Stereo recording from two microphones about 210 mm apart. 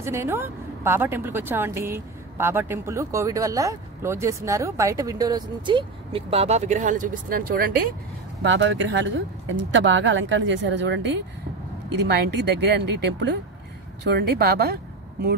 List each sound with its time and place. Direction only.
0.0 s a woman's voice: 10° right (ahead or behind); by 7.9 s 45° right (ahead or behind)
8.4 s a woman's voice: 60° right (ahead or behind)